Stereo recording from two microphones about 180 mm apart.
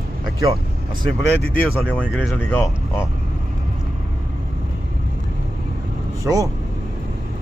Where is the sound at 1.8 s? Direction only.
10° left (ahead or behind).